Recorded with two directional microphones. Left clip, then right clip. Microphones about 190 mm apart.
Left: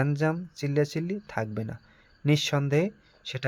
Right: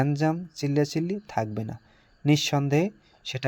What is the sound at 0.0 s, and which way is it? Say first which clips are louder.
Speech: right 2 dB; 5° right (ahead or behind).